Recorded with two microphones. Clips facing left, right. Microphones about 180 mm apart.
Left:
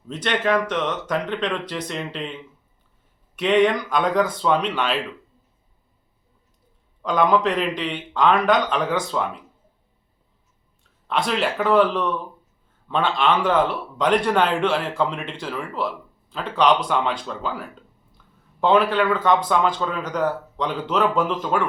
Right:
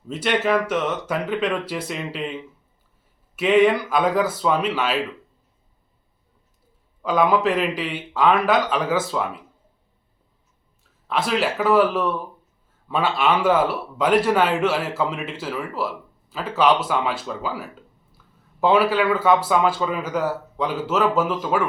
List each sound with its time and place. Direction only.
0.1 s speech: 10° right (ahead or behind)
3.3 s speech: 5° right (ahead or behind)
7.0 s speech: 5° right (ahead or behind)
11.1 s speech: 5° right (ahead or behind)